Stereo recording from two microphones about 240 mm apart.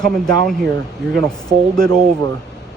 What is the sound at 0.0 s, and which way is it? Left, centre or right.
A man's voice, centre.